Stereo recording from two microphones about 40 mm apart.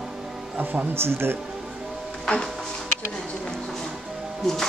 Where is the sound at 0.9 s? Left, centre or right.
Right.